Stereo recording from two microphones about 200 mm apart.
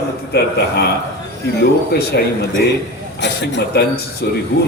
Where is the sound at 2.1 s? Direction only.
55° left (ahead or behind).